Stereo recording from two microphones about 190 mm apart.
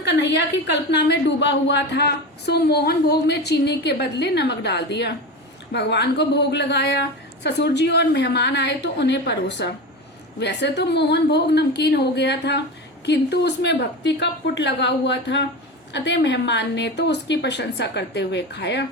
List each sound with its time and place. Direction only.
0.0 s a woman's voice: 65° left (ahead or behind)